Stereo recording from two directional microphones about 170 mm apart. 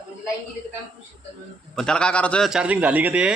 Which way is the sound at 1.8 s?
5° left (ahead or behind).